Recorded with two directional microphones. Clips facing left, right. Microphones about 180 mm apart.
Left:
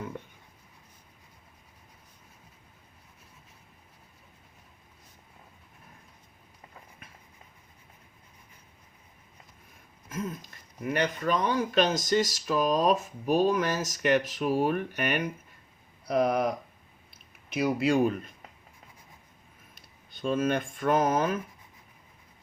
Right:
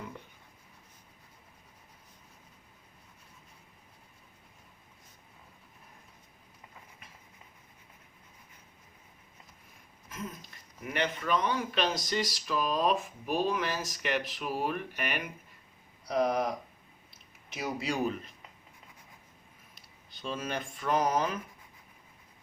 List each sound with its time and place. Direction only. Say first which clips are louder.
10.9 s speech: left 3 dB; 40° left (ahead or behind)
16.0 s speech: left 3 dB; 55° left (ahead or behind)
17.5 s speech: left 9 dB; 60° left (ahead or behind)
19.7 s speech: left 2 dB; 50° left (ahead or behind)